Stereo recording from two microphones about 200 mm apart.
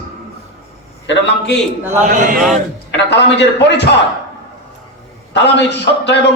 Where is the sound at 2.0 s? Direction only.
40° right (ahead or behind).